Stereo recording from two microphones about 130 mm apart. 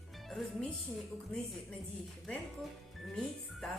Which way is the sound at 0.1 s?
Centre (ahead or behind).